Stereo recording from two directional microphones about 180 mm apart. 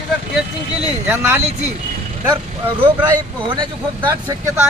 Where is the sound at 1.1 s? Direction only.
10° right (ahead or behind).